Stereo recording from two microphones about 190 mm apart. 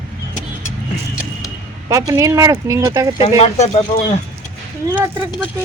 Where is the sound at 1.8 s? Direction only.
15° right (ahead or behind).